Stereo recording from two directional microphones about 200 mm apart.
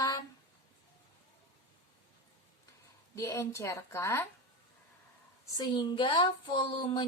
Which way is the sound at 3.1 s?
15° left (ahead or behind).